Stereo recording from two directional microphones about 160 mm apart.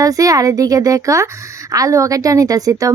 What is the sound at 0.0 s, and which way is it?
A woman's voice, 20° right (ahead or behind).